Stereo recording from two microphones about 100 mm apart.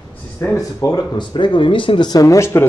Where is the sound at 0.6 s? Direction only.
35° left (ahead or behind); by 2.1 s 60° left (ahead or behind).